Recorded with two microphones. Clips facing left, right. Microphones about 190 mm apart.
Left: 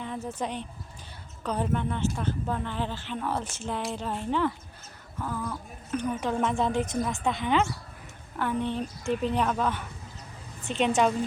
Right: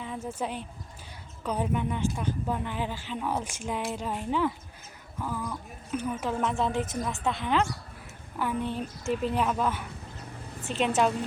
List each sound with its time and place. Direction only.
0.0 s speech: 5° right (ahead or behind)